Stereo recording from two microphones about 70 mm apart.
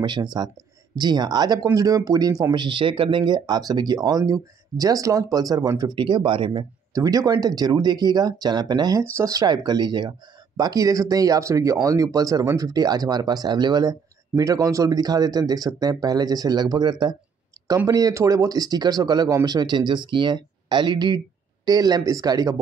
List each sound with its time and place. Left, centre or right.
0.0 s speech: right
3.3 s speech: right
6.9 s speech: right
9.2 s speech: right
10.6 s speech: right
17.8 s speech: right
19.4 s speech: right
21.6 s speech: right